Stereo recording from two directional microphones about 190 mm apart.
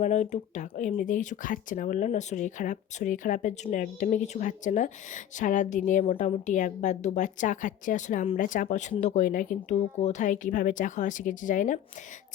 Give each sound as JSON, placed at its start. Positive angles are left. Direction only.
{"t": 0.0, "sound": "speech", "side_deg": 35}